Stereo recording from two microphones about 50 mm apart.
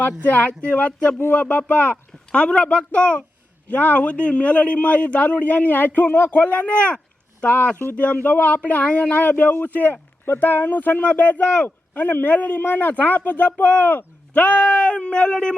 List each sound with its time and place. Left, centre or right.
0.3 s a man's voice: left
6.3 s a man's voice: left